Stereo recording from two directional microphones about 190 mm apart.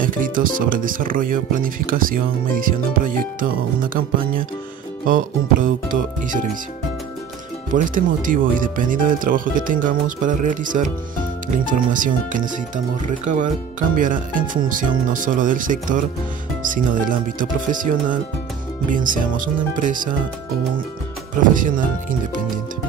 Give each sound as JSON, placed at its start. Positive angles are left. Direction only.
{"t": 0.0, "sound": "speech", "side_deg": -45}
{"t": 7.7, "sound": "speech", "side_deg": -45}
{"t": 21.4, "sound": "speech", "side_deg": -45}